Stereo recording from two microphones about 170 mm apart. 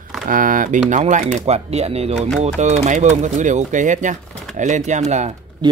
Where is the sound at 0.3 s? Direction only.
55° right (ahead or behind).